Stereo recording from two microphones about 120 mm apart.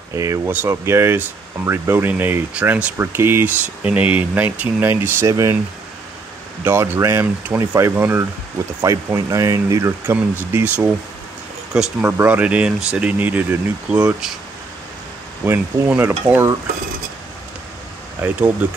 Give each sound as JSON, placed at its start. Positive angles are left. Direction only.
{"t": 0.1, "sound": "speech", "side_deg": -25}
{"t": 6.6, "sound": "speech", "side_deg": -20}
{"t": 10.0, "sound": "speech", "side_deg": -15}
{"t": 16.0, "sound": "speech", "side_deg": -20}
{"t": 18.2, "sound": "speech", "side_deg": -15}